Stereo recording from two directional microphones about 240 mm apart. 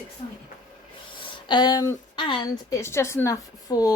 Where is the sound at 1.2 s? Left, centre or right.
Centre.